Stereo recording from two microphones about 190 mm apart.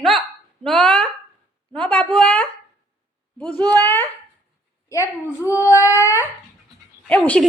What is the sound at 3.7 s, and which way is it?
Speech, 20° right (ahead or behind).